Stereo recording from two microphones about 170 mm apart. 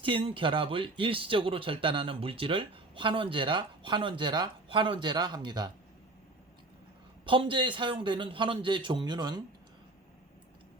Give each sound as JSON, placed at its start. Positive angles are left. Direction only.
{"t": 0.0, "sound": "speech", "side_deg": -30}
{"t": 7.3, "sound": "speech", "side_deg": -30}